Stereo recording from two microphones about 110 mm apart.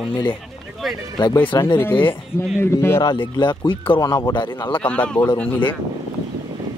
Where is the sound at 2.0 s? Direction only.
20° left (ahead or behind); by 4.0 s 50° left (ahead or behind).